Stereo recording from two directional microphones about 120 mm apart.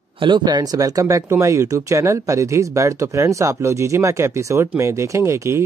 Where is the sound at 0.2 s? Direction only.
40° right (ahead or behind).